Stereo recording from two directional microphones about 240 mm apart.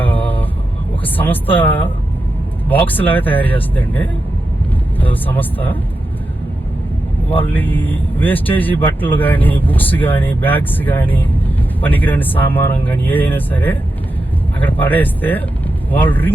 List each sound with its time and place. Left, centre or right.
0.0 s vehicle: centre
1.0 s speech: centre
7.4 s speech: centre